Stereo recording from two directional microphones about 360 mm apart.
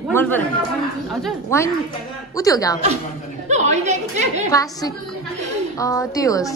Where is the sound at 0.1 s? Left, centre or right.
Centre.